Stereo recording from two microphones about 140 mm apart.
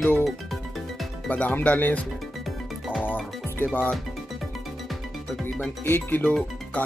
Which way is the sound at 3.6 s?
10° left (ahead or behind).